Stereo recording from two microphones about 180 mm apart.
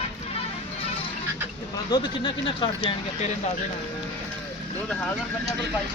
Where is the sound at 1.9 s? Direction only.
20° left (ahead or behind).